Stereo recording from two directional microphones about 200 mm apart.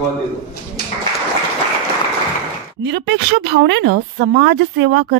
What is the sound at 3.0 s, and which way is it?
A woman's voice, 60° right (ahead or behind).